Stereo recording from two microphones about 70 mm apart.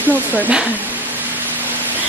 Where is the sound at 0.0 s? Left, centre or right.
Right.